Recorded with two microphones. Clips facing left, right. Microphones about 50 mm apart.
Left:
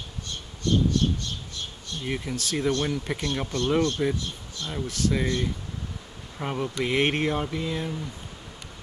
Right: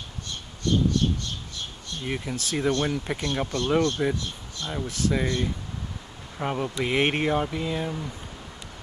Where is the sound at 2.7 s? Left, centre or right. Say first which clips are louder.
Right 1 dB; centre.